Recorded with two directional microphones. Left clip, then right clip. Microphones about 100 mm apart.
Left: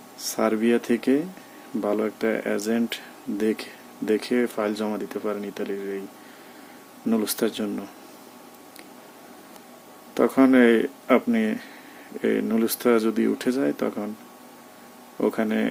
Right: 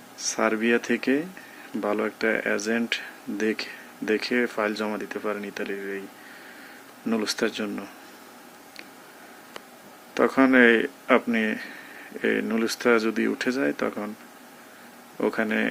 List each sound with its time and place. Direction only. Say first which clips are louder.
0.2 s speech: even; 25° left (ahead or behind)
7.1 s speech: left 1 dB; 25° left (ahead or behind)
10.2 s speech: even; 25° left (ahead or behind)
15.2 s speech: even; 25° left (ahead or behind)